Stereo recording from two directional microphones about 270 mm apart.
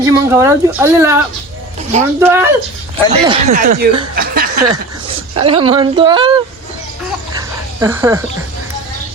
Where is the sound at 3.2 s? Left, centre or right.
Right.